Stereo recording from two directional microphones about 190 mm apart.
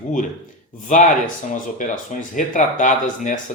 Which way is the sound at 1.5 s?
40° left (ahead or behind).